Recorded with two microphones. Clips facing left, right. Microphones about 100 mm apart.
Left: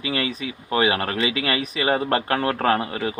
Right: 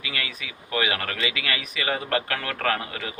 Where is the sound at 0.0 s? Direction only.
30° left (ahead or behind).